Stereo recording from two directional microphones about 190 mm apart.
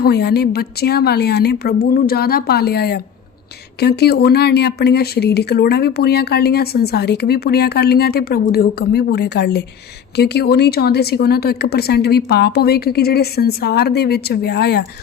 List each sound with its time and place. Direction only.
0.0 s speech: 60° left (ahead or behind)